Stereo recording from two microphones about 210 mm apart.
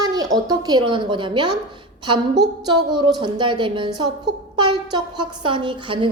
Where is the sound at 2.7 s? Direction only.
20° right (ahead or behind).